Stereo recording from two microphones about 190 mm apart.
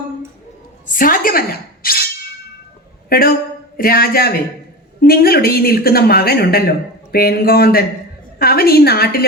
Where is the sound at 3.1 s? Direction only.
50° left (ahead or behind).